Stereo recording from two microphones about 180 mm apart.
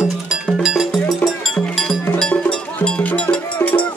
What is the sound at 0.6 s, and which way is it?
Music, centre (ahead or behind).